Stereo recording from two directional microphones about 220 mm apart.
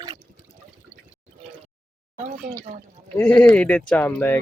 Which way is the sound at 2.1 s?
35° right (ahead or behind).